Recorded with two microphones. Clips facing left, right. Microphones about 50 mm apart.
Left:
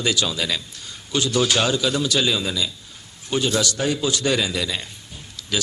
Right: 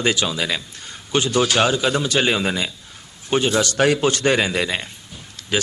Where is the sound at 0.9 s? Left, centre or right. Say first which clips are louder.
Right 3 dB; right.